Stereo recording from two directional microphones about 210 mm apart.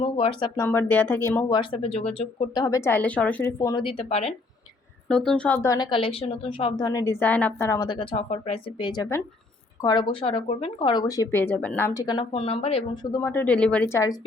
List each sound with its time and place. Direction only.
0.0 s speech: 25° left (ahead or behind)
5.0 s speech: 5° left (ahead or behind)